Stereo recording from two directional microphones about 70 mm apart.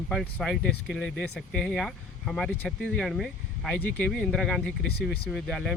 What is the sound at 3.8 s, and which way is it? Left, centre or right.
Speech, left.